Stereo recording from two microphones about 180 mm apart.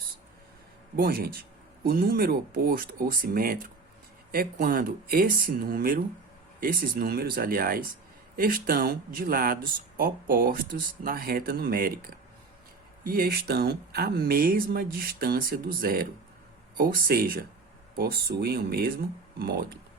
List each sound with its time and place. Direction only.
0.9 s speech: 60° right (ahead or behind)